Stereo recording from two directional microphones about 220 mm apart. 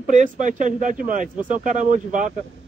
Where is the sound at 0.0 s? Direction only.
35° right (ahead or behind).